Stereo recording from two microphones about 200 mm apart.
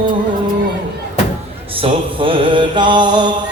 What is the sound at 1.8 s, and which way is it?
Mantra, 25° right (ahead or behind).